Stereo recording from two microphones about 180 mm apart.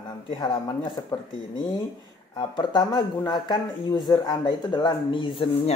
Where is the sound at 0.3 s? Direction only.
25° left (ahead or behind).